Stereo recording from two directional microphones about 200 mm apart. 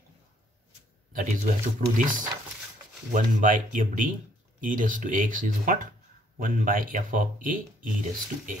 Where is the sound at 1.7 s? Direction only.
45° right (ahead or behind).